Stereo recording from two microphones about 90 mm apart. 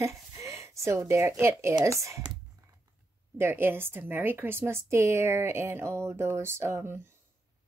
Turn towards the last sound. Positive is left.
turn(degrees=-25)  # may be behind; listen again after turning